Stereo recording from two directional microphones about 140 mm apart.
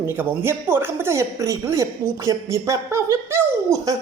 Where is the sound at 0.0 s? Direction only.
15° right (ahead or behind).